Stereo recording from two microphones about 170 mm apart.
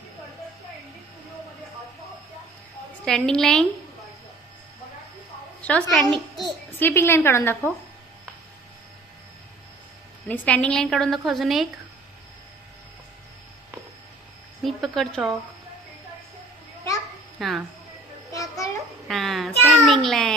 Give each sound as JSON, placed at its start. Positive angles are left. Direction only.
{"t": 3.0, "sound": "a woman's voice", "side_deg": 5}
{"t": 5.6, "sound": "a woman's voice", "side_deg": 5}
{"t": 6.7, "sound": "a woman's voice", "side_deg": 15}
{"t": 10.2, "sound": "a woman's voice", "side_deg": 10}
{"t": 14.6, "sound": "speech", "side_deg": 0}
{"t": 17.4, "sound": "a woman's voice", "side_deg": 0}
{"t": 18.3, "sound": "a sound", "side_deg": 20}
{"t": 19.0, "sound": "a woman's voice", "side_deg": 0}